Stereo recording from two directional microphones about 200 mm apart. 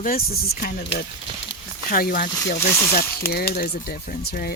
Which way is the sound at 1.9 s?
45° left (ahead or behind).